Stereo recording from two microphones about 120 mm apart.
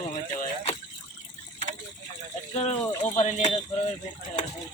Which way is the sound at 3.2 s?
65° left (ahead or behind).